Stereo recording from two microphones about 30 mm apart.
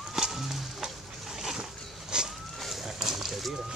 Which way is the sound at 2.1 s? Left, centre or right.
Right.